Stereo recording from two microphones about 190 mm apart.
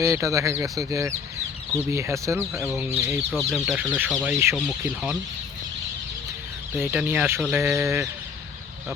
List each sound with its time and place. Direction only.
0.0 s speech: 15° right (ahead or behind)
6.7 s speech: 10° right (ahead or behind)